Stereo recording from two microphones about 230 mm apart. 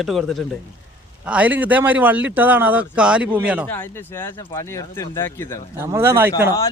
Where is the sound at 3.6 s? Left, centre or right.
Centre.